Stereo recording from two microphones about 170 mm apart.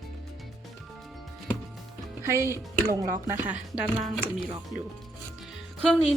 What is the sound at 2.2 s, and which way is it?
Speech, 15° right (ahead or behind).